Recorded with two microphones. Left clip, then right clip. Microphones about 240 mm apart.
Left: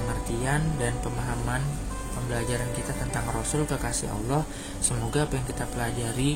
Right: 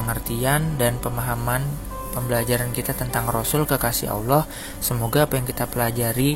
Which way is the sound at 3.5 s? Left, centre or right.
Right.